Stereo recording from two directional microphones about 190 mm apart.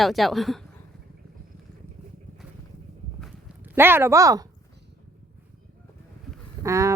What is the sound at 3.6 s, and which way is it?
Speech, 10° right (ahead or behind).